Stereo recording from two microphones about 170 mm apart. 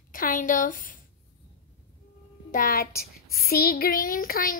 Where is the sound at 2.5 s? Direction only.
60° left (ahead or behind).